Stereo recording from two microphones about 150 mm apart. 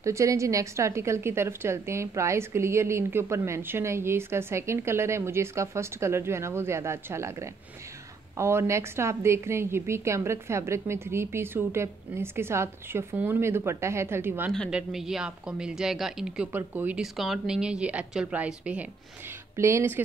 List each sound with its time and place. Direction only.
0.0 s a woman's voice: 20° right (ahead or behind)